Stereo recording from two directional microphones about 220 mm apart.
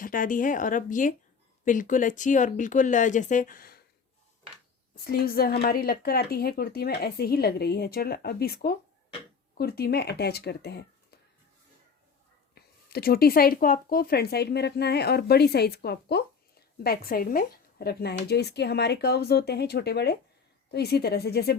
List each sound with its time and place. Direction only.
0.0 s speech: 40° left (ahead or behind)
4.9 s speech: 45° left (ahead or behind)
12.5 s speech: 45° left (ahead or behind)